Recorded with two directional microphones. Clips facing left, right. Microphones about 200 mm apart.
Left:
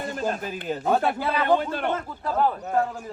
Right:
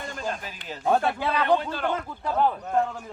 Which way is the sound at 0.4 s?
50° left (ahead or behind).